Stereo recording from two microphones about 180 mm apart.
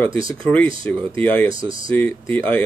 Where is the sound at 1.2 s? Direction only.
10° left (ahead or behind).